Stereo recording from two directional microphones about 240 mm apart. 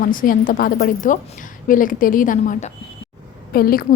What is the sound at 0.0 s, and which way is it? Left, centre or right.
A woman's voice, left.